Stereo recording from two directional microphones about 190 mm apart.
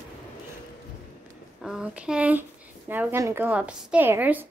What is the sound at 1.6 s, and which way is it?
A woman's voice, 5° right (ahead or behind).